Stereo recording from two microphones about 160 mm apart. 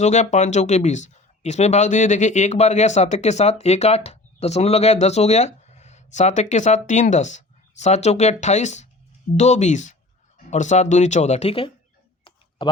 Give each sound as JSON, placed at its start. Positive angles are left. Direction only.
{"t": 0.0, "sound": "speech", "side_deg": 45}